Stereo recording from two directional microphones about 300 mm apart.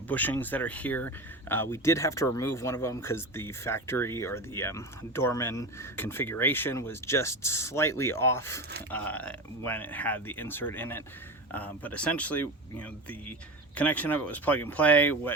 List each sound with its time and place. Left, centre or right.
0.1 s speech: centre